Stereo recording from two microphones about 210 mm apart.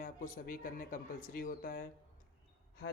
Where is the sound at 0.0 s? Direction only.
40° left (ahead or behind).